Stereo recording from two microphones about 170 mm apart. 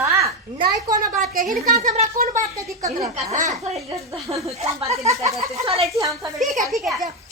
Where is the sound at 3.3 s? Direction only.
50° right (ahead or behind).